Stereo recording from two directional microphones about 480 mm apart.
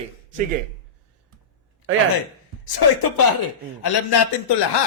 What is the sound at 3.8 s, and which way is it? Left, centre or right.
Speech, left.